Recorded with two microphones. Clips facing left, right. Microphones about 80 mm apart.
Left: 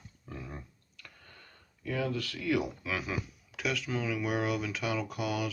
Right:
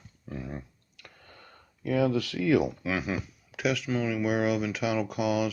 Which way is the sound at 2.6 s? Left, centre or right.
Centre.